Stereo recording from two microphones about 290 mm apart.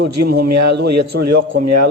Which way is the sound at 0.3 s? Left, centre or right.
Right.